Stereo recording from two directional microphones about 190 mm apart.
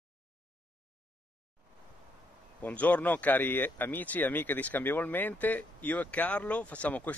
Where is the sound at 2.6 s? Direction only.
10° left (ahead or behind).